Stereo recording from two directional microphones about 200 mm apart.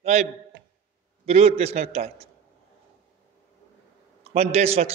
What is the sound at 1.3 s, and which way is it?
A man's voice, 30° right (ahead or behind).